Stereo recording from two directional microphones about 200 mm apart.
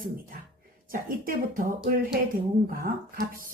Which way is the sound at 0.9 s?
45° right (ahead or behind).